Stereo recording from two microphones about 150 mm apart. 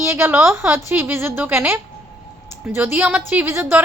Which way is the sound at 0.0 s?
15° right (ahead or behind).